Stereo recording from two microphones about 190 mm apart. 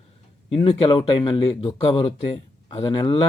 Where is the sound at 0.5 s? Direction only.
30° left (ahead or behind).